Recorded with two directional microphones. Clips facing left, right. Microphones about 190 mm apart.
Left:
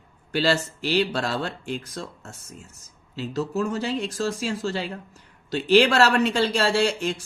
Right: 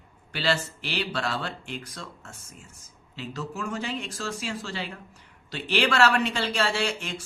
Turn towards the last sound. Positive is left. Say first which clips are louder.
# left 6 dB
turn(degrees=40)  # may be behind; listen again after turning